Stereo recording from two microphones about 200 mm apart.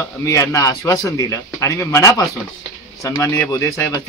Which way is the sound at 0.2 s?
15° left (ahead or behind).